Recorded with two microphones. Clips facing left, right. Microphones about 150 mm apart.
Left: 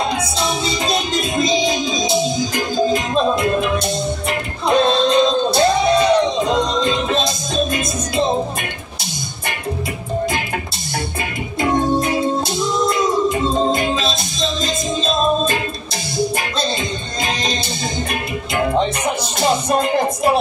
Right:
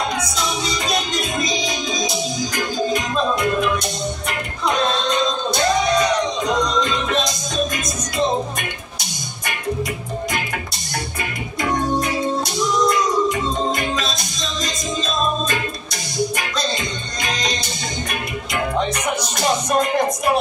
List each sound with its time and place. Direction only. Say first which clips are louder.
0.4 s music: left 3 dB; 30° left (ahead or behind)
4.6 s music: left 5 dB; 30° left (ahead or behind)
12.7 s music: even; 25° left (ahead or behind)
17.2 s music: left 2 dB; 30° left (ahead or behind)